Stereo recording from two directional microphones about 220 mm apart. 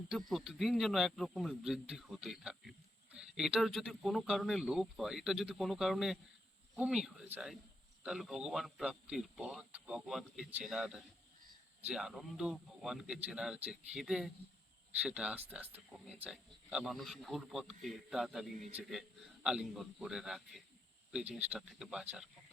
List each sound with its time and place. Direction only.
0.3 s speech: centre (ahead or behind)
18.5 s a man's voice: 35° right (ahead or behind)
18.8 s speech: centre (ahead or behind)